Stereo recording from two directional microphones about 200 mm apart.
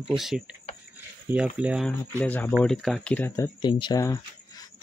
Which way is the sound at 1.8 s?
10° left (ahead or behind).